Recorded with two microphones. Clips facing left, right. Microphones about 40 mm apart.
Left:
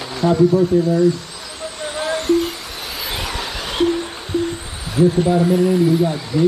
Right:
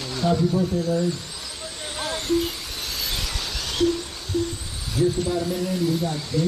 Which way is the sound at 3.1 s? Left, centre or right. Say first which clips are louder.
Left 5 dB; left.